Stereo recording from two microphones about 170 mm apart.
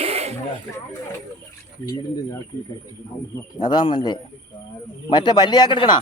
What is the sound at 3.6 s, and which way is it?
A man's voice, 25° left (ahead or behind).